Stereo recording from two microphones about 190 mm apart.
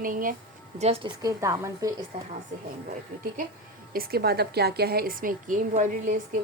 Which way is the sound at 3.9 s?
55° right (ahead or behind).